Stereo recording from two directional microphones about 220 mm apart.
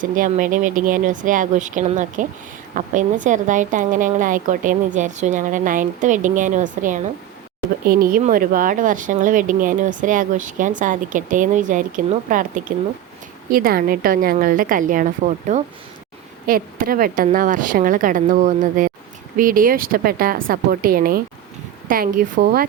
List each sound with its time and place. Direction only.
0.0 s a woman's voice: 40° right (ahead or behind)